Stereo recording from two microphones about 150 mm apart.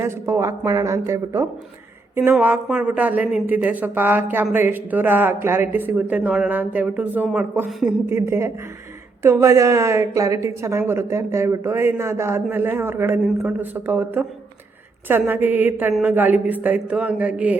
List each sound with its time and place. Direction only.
0.0 s a woman's voice: 20° right (ahead or behind); by 7.9 s centre (ahead or behind)
8.1 s a woman's voice: 20° right (ahead or behind)